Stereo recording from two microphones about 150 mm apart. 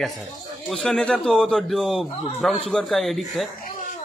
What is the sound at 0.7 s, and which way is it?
Speech, 5° left (ahead or behind).